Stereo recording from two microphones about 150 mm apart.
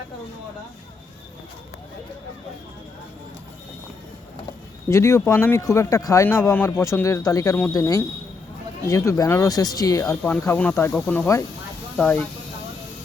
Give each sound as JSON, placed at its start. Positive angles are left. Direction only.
{"t": 4.9, "sound": "speech", "side_deg": 20}
{"t": 10.4, "sound": "speech", "side_deg": 10}